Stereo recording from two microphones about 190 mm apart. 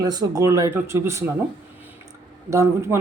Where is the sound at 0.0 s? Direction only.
20° right (ahead or behind).